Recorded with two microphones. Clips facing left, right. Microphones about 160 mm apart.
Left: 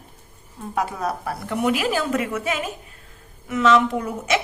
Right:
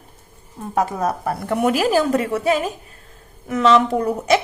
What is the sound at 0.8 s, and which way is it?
A woman's voice, 45° right (ahead or behind).